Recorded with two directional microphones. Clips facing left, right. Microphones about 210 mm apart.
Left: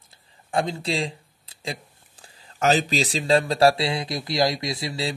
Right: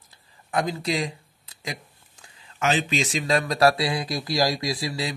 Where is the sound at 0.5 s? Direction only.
30° left (ahead or behind).